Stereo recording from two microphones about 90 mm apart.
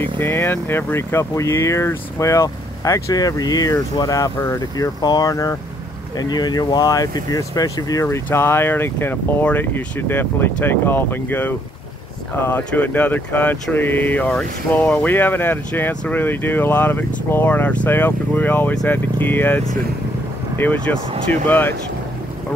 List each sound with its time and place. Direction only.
0.2 s speech: 25° left (ahead or behind)
6.1 s speech: 50° left (ahead or behind); by 19.6 s 20° left (ahead or behind)
20.6 s speech: 20° left (ahead or behind)